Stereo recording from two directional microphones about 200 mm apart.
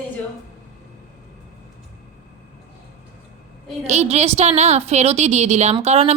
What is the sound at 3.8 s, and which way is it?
A woman's voice, 35° right (ahead or behind).